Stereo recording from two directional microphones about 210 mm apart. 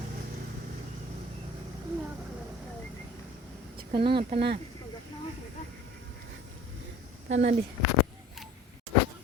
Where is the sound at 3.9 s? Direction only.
25° right (ahead or behind).